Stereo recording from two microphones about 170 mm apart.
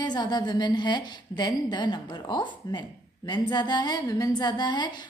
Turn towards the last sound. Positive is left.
turn(degrees=25)  # may be behind; listen again after turning